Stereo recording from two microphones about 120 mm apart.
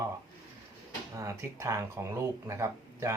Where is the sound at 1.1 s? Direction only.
25° right (ahead or behind).